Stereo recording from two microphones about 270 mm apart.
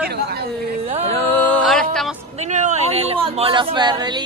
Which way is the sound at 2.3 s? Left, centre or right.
Right.